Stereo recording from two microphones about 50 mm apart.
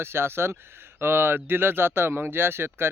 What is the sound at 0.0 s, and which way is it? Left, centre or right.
A man's voice, right.